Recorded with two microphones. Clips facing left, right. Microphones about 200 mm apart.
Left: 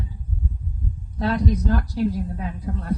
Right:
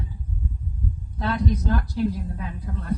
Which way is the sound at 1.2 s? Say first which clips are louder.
Left 3 dB; 40° left (ahead or behind).